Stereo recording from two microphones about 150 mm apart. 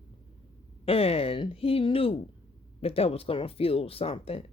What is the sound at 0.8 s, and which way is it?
Speech, 40° left (ahead or behind).